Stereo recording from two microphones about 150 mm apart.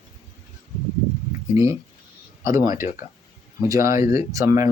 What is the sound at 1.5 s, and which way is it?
Speech, 20° right (ahead or behind).